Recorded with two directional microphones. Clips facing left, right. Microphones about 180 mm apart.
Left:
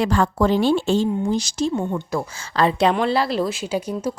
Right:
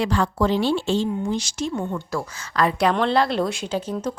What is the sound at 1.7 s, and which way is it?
A woman's voice, 20° left (ahead or behind).